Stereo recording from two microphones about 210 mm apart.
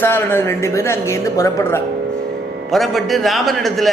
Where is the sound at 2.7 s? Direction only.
Centre (ahead or behind).